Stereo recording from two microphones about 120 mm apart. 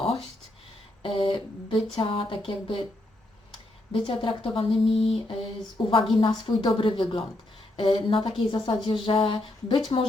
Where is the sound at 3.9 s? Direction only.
45° left (ahead or behind).